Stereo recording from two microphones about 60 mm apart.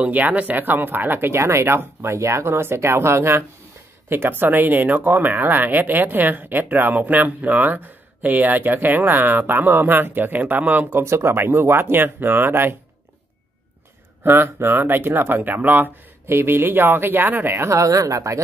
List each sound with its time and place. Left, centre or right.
0.0 s speech: right
4.1 s speech: right
14.2 s speech: right
16.3 s speech: right
17.6 s speech: right